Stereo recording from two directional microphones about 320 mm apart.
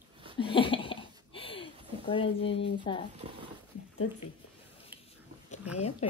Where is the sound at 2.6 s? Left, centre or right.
Centre.